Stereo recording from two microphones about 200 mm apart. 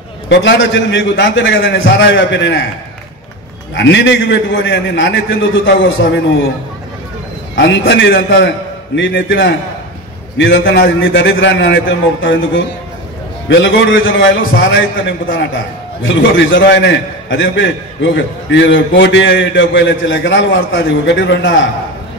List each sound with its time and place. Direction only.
0.3 s a man's voice: 65° left (ahead or behind)
3.7 s a man's voice: 60° left (ahead or behind)
7.5 s a man's voice: 65° left (ahead or behind)